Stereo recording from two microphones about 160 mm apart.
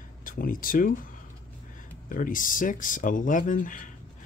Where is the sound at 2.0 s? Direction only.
55° left (ahead or behind).